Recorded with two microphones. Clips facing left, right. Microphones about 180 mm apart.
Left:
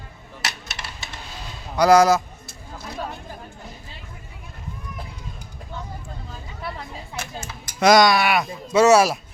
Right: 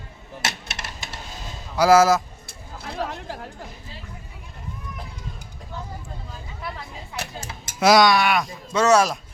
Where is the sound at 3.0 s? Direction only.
85° right.